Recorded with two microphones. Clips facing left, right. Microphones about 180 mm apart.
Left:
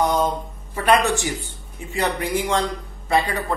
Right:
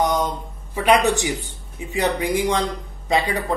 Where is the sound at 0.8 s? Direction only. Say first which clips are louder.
Right 1 dB; 15° right (ahead or behind).